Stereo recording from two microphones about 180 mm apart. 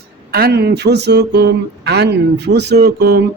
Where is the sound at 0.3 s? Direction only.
60° right (ahead or behind).